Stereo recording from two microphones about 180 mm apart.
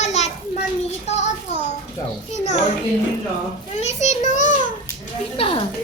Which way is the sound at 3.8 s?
40° left (ahead or behind).